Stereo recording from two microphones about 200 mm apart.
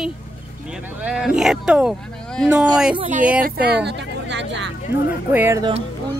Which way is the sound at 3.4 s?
50° right (ahead or behind).